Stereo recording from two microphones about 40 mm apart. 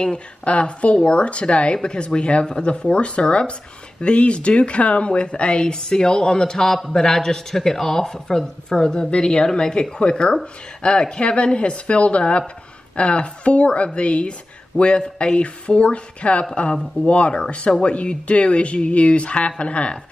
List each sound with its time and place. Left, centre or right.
0.0 s speech: left